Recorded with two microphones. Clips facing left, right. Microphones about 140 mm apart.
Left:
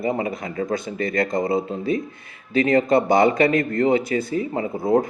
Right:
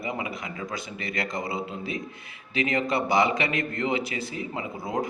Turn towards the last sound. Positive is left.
turn(degrees=45)  # may be behind; listen again after turning